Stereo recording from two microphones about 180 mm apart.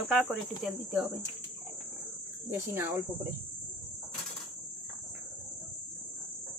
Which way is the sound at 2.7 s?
10° right (ahead or behind).